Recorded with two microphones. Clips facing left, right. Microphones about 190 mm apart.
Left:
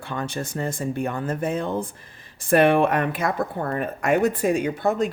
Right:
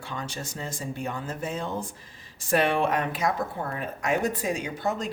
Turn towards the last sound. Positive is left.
turn(degrees=55)  # may be behind; listen again after turning